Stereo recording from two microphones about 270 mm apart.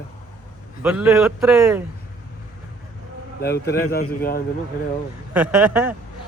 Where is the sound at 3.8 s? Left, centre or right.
Left.